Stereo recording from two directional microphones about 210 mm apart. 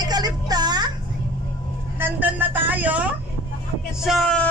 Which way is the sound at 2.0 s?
10° right (ahead or behind).